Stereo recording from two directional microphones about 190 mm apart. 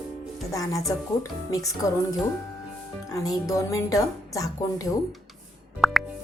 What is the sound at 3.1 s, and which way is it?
Speech, 20° left (ahead or behind).